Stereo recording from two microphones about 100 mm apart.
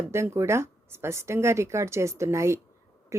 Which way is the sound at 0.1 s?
25° right (ahead or behind).